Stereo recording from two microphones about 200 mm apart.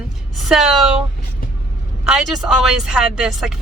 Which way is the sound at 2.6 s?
5° right (ahead or behind).